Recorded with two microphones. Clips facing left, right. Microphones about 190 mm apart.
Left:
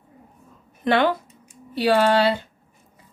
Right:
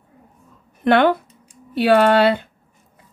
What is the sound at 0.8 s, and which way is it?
A woman's voice, 60° right (ahead or behind).